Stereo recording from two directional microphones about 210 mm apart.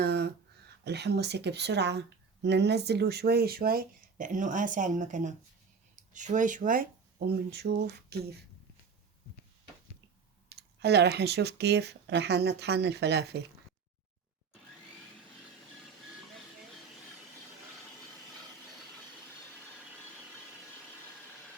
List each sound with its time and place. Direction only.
0.0 s a sound: 50° right (ahead or behind)
0.9 s speech: 55° right (ahead or behind)
10.5 s speech: 50° right (ahead or behind)